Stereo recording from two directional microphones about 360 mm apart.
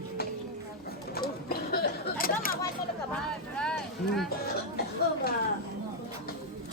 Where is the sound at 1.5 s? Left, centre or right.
Left.